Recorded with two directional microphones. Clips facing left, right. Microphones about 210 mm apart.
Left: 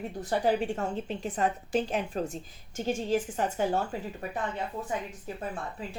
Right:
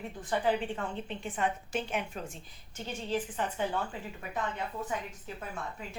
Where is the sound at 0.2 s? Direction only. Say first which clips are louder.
Left 3 dB; 40° left (ahead or behind).